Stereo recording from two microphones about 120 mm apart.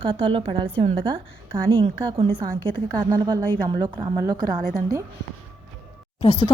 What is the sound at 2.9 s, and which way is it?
A woman's voice, 35° right (ahead or behind).